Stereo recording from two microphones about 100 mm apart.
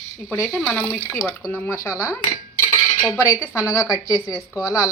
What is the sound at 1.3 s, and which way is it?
A woman's voice, 20° left (ahead or behind).